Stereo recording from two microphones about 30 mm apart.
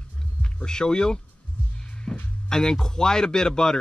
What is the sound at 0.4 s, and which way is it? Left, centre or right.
A man's voice, left.